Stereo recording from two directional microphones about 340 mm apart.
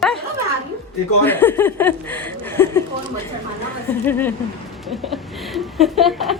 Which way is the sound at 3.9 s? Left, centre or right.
Centre.